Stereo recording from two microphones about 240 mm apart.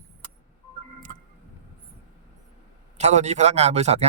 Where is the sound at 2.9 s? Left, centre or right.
Right.